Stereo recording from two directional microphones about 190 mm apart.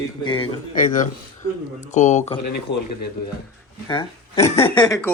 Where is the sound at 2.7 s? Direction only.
65° left (ahead or behind).